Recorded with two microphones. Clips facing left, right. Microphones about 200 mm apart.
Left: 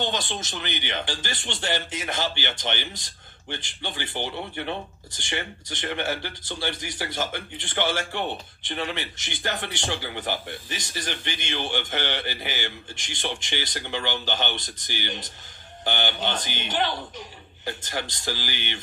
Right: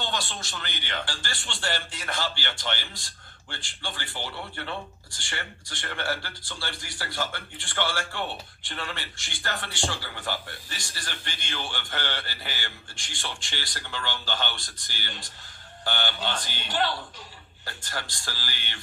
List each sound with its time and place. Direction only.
0.0 s speech: 20° left (ahead or behind)